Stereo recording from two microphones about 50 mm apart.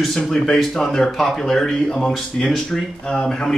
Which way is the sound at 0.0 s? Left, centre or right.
Centre.